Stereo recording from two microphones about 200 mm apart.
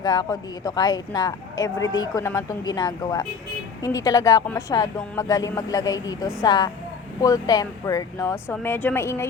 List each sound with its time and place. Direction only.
0.0 s a woman's voice: 20° left (ahead or behind)